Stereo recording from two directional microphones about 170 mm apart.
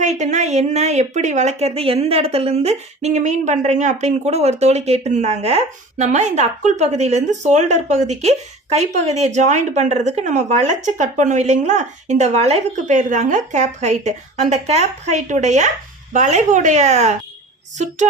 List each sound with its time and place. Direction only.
0.0 s speech: 45° right (ahead or behind)